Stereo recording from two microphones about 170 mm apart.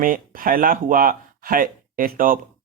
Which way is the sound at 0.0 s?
55° right (ahead or behind).